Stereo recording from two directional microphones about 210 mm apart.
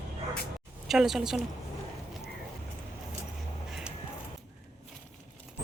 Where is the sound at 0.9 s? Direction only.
Centre (ahead or behind).